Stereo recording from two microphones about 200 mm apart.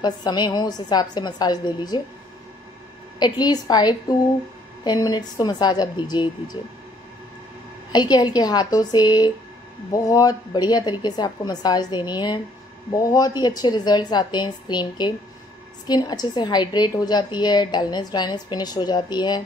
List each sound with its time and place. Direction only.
0.0 s a woman's voice: 20° left (ahead or behind)
3.2 s a woman's voice: 20° left (ahead or behind)
7.9 s a woman's voice: 20° left (ahead or behind)